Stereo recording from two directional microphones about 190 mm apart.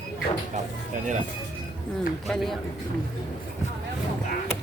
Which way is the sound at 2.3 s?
Centre (ahead or behind).